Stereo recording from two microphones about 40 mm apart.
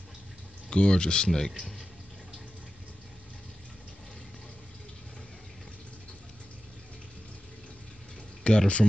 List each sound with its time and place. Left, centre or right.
0.7 s speech: left
8.5 s speech: left